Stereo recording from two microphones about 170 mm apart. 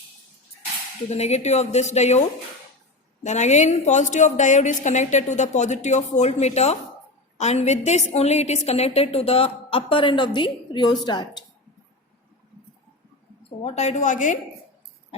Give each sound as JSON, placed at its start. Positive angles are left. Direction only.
{"t": 1.1, "sound": "a woman's voice", "side_deg": 40}
{"t": 3.2, "sound": "a woman's voice", "side_deg": 45}
{"t": 13.6, "sound": "a woman's voice", "side_deg": 40}